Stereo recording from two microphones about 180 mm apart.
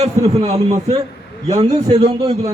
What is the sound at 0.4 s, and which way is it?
A man's voice, 35° right (ahead or behind).